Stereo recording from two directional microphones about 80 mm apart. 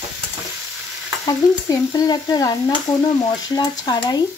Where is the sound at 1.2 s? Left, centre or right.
Left.